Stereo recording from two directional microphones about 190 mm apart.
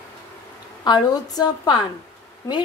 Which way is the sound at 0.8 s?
20° left (ahead or behind).